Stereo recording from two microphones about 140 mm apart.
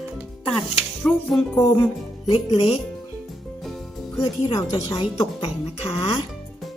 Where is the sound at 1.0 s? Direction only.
5° left (ahead or behind).